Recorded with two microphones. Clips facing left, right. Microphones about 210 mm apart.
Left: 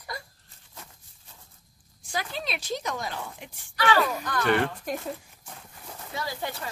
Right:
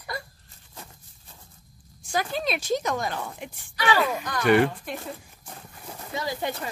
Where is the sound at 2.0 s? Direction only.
45° right (ahead or behind).